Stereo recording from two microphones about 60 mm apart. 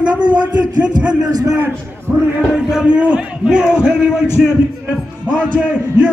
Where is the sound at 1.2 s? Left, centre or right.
Right.